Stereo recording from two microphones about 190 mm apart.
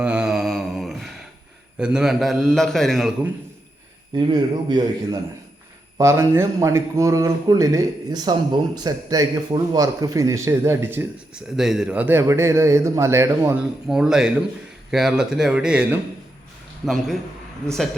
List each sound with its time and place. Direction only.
0.0 s mantra: 5° right (ahead or behind)
1.8 s a man's voice: 5° right (ahead or behind)
4.1 s a man's voice: 20° right (ahead or behind)
6.0 s a man's voice: 15° right (ahead or behind); by 17.2 s centre (ahead or behind)